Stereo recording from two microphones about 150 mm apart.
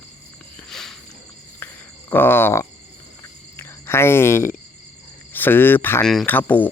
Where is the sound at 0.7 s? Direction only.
Centre (ahead or behind).